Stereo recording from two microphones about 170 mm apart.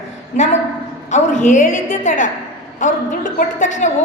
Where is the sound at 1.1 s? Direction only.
45° left (ahead or behind).